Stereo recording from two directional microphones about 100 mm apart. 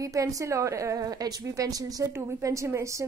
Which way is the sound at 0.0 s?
35° right (ahead or behind).